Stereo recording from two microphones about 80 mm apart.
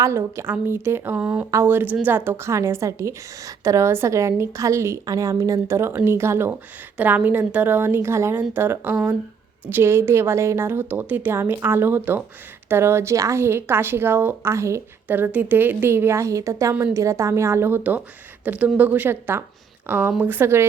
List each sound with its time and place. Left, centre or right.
0.0 s a woman's voice: right
6.9 s a woman's voice: right
15.0 s a woman's voice: right